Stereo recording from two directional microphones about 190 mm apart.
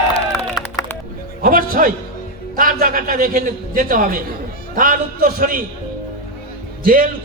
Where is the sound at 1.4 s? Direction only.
50° right (ahead or behind).